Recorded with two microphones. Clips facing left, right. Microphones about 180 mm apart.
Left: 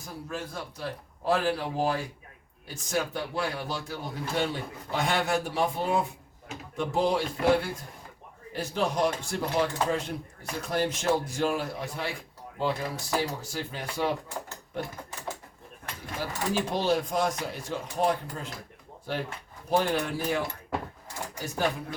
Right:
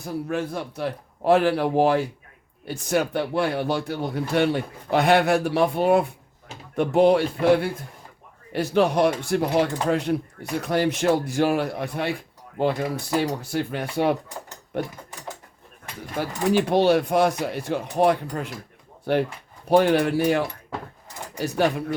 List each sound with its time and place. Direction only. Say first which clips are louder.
0.0 s a man's voice: right 10 dB; 65° right (ahead or behind)
13.4 s speech: right 9 dB; 60° right (ahead or behind)
16.2 s a man's voice: right 8 dB; 65° right (ahead or behind)